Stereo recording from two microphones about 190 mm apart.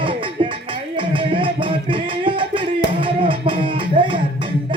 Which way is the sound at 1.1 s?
25° right (ahead or behind).